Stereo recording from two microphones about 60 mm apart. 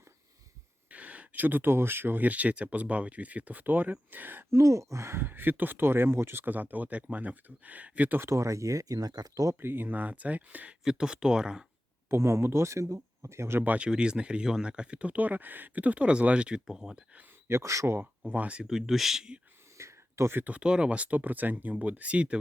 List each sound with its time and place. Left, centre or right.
0.9 s speech: right
4.5 s speech: right
8.2 s speech: right
9.6 s speech: right
10.8 s speech: centre
12.1 s speech: right
13.7 s speech: centre
17.5 s speech: right
18.3 s speech: right
18.6 s speech: centre
19.7 s whispering: right
20.3 s speech: right
20.6 s speech: centre